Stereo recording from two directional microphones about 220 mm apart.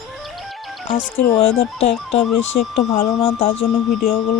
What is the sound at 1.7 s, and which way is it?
Speech, 30° left (ahead or behind).